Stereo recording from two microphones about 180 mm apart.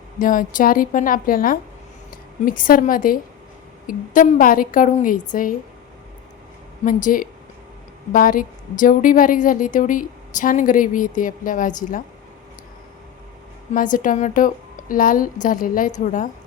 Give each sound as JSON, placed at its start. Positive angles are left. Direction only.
{"t": 0.2, "sound": "a woman's voice", "side_deg": 50}
{"t": 6.8, "sound": "a woman's voice", "side_deg": 50}
{"t": 13.7, "sound": "a woman's voice", "side_deg": 45}